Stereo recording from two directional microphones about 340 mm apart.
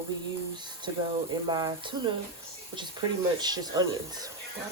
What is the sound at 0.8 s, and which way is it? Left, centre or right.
Speech, centre.